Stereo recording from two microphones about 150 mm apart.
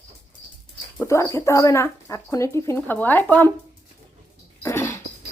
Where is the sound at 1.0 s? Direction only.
20° left (ahead or behind).